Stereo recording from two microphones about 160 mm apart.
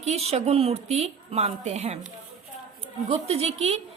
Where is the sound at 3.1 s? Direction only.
40° right (ahead or behind).